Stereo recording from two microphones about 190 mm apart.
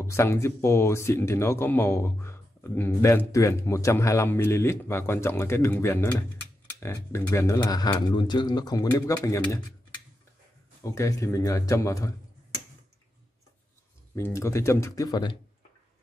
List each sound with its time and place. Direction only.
0.0 s speech: 15° left (ahead or behind)
14.1 s speech: 15° left (ahead or behind)